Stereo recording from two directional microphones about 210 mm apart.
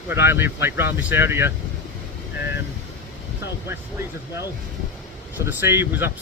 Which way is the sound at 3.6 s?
15° right (ahead or behind).